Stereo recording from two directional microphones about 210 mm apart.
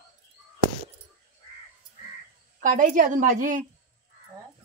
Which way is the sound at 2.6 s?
40° right (ahead or behind).